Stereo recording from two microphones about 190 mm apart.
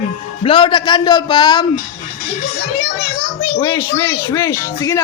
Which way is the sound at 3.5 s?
15° left (ahead or behind).